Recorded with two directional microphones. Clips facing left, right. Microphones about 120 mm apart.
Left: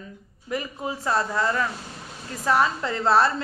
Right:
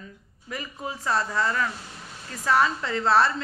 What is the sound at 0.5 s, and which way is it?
A woman's voice, 30° left (ahead or behind).